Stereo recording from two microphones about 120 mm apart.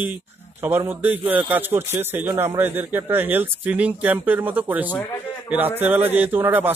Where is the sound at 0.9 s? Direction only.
15° right (ahead or behind).